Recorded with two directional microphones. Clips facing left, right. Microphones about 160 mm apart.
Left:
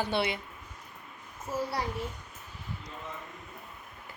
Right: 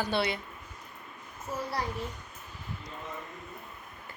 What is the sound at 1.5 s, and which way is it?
Speech, 15° left (ahead or behind).